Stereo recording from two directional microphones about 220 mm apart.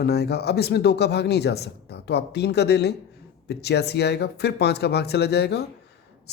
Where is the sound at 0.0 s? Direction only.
45° left (ahead or behind).